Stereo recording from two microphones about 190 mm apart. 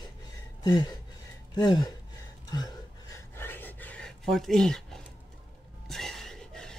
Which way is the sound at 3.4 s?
10° left (ahead or behind).